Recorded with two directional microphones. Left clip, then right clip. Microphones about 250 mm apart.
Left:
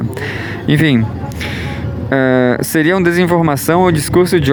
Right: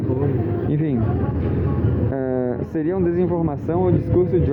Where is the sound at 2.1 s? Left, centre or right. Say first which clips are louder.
Left 14 dB; left.